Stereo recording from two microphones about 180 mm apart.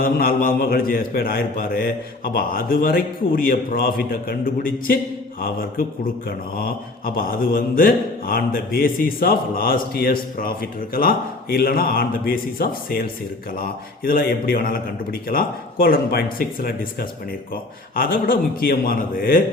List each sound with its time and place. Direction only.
0.0 s speech: 55° left (ahead or behind)
6.2 s speech: 55° left (ahead or behind)